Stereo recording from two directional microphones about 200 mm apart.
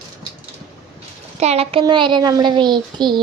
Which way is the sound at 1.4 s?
30° right (ahead or behind).